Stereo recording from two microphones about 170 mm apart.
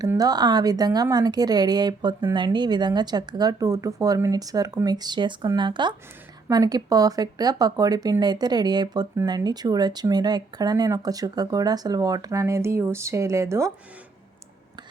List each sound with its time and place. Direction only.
0.0 s speech: 20° right (ahead or behind)